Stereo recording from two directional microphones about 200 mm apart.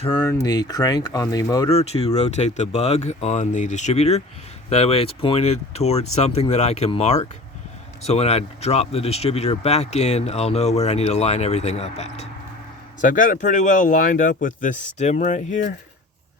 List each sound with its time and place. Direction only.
0.0 s speech: 25° left (ahead or behind)
1.7 s speech: 30° left (ahead or behind)